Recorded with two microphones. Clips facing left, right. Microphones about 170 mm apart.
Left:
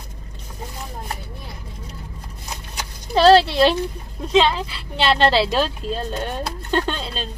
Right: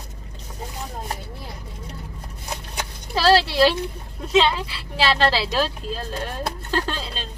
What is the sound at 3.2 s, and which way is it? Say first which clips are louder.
Speech: left 4 dB; 5° right (ahead or behind).